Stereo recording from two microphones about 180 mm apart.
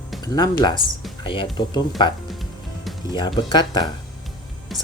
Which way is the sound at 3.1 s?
25° left (ahead or behind).